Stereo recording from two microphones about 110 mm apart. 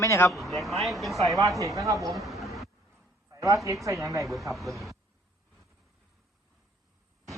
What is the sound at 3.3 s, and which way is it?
Speech, 30° right (ahead or behind).